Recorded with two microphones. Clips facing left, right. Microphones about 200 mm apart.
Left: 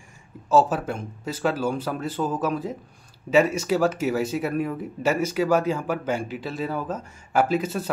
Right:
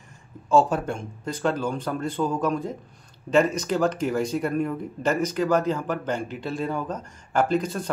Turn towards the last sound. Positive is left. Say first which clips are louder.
# even
turn(degrees=5)  # may be behind; listen again after turning